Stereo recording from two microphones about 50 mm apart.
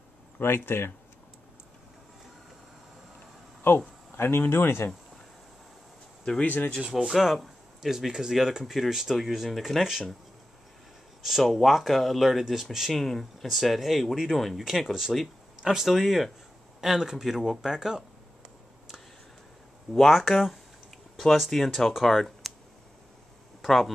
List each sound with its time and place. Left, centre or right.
0.6 s speech: left
4.2 s speech: left
6.4 s speech: left
7.0 s speech: centre
11.2 s speech: centre
12.9 s speech: centre
19.9 s speech: centre
23.6 s speech: centre